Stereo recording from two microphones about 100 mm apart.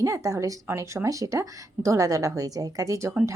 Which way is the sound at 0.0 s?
30° right (ahead or behind).